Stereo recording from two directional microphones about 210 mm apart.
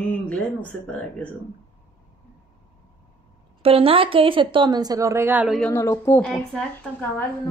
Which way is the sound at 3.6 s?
25° right (ahead or behind).